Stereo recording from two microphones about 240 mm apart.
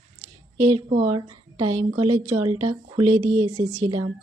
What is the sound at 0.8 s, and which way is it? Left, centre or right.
Speech, right.